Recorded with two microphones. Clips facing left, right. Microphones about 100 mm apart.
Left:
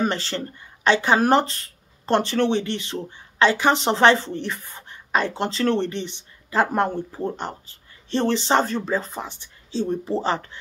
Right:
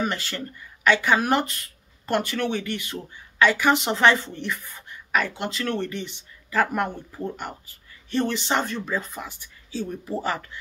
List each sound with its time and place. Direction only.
0.0 s speech: 30° left (ahead or behind)